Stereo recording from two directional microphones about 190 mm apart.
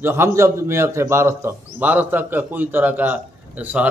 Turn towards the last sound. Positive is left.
turn(degrees=-5)  # may be behind; listen again after turning